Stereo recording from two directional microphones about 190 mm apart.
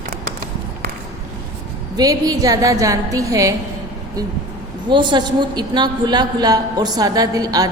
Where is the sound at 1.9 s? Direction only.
20° right (ahead or behind).